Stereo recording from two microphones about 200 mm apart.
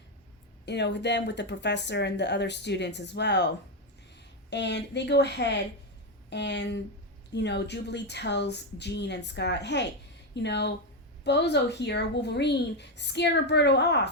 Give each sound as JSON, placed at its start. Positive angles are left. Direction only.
{"t": 0.6, "sound": "speech", "side_deg": 60}